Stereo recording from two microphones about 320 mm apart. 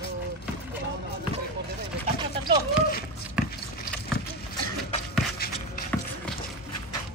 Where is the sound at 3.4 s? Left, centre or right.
Centre.